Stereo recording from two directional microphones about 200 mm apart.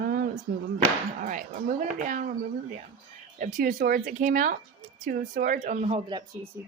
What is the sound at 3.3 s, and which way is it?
Speech, 40° right (ahead or behind).